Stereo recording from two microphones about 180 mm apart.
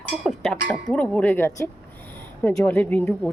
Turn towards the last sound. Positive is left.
turn(degrees=10)  # may be behind; listen again after turning